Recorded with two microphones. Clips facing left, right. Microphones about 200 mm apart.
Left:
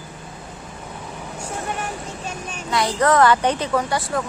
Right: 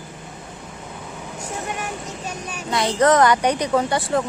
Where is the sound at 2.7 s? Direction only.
20° right (ahead or behind).